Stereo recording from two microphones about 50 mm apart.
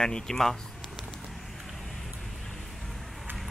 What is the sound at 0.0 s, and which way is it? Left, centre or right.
Speech, centre.